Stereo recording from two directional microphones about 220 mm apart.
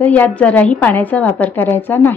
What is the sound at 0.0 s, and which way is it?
Speech, 5° left (ahead or behind).